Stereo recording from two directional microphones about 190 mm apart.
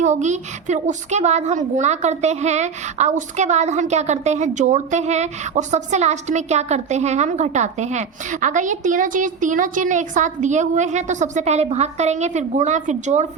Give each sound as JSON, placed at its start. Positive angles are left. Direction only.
{"t": 0.0, "sound": "a woman's voice", "side_deg": -40}